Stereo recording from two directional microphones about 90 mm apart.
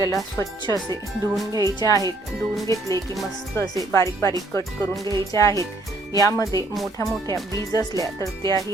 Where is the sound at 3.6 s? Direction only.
30° left (ahead or behind).